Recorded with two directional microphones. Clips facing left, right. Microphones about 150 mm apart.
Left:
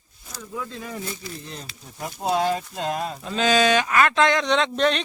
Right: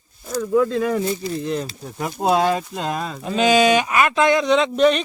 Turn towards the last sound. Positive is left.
turn(degrees=-5)  # may be behind; listen again after turning